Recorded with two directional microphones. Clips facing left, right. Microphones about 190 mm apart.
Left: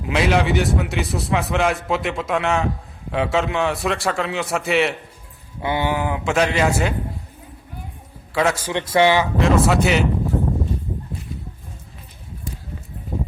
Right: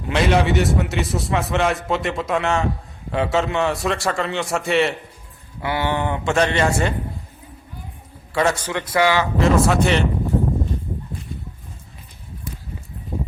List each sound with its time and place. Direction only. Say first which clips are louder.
0.0 s a man's voice: right 1 dB; centre (ahead or behind)
5.6 s a man's voice: left 1 dB; 15° left (ahead or behind)
8.3 s a man's voice: even; centre (ahead or behind)
8.7 s a man's voice: left 5 dB; 25° left (ahead or behind)
9.2 s a man's voice: even; centre (ahead or behind)